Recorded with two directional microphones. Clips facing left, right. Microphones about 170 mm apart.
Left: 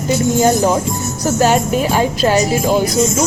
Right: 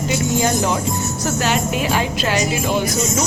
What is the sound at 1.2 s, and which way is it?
Speech, 40° left (ahead or behind).